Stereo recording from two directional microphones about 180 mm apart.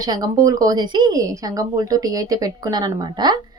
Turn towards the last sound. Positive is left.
turn(degrees=-25)  # may be behind; listen again after turning